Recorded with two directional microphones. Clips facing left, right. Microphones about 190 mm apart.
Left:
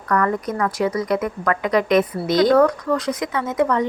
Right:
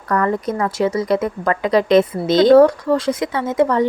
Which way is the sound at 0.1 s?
30° right (ahead or behind).